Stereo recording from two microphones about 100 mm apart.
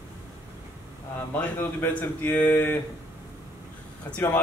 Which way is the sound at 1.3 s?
20° left (ahead or behind).